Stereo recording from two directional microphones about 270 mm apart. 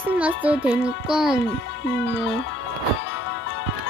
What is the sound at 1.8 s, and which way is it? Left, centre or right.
Speech, left.